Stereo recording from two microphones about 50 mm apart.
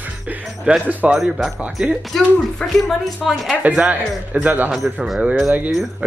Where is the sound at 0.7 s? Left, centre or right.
Right.